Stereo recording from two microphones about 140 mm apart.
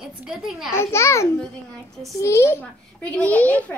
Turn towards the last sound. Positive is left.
turn(degrees=10)  # may be behind; listen again after turning